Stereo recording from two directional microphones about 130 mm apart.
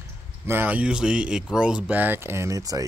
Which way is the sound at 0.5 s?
15° right (ahead or behind).